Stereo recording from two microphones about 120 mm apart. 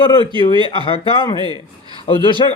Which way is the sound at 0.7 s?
50° left (ahead or behind).